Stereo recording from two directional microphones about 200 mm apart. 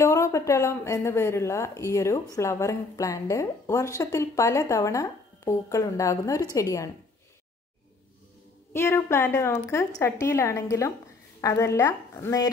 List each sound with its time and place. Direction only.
0.0 s a woman's voice: 15° left (ahead or behind)
8.7 s a woman's voice: 10° left (ahead or behind)